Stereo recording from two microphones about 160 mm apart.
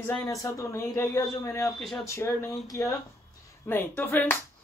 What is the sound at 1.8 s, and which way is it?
Speech, centre (ahead or behind).